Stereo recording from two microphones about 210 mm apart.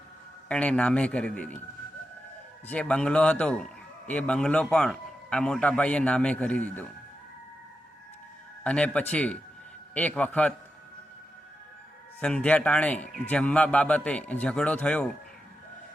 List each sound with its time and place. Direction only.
0.4 s a man's voice: 5° left (ahead or behind)
2.6 s a man's voice: 5° left (ahead or behind)
8.6 s a man's voice: 5° left (ahead or behind)
12.2 s a man's voice: 5° left (ahead or behind)